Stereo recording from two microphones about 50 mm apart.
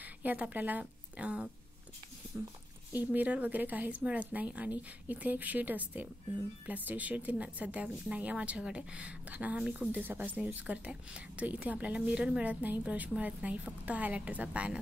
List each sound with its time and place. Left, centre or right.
0.0 s a woman's voice: right
2.3 s speech: right